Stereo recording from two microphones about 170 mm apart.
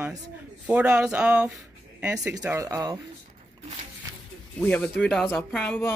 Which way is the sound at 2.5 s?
20° right (ahead or behind).